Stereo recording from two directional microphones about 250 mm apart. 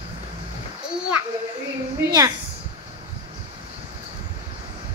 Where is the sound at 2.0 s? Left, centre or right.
Centre.